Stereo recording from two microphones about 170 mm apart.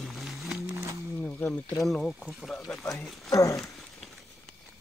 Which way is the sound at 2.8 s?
15° left (ahead or behind).